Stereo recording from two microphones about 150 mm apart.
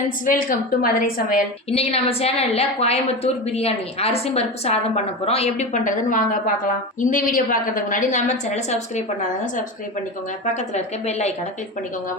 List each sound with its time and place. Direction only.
0.3 s a woman's voice: 65° left (ahead or behind)
1.7 s a woman's voice: 45° left (ahead or behind)
10.5 s a woman's voice: 50° left (ahead or behind)